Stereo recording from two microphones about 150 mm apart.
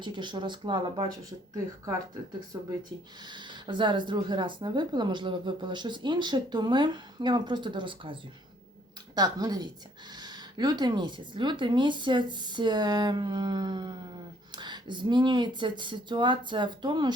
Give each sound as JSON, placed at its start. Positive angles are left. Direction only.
{"t": 0.0, "sound": "speech", "side_deg": -30}
{"t": 3.2, "sound": "speech", "side_deg": -30}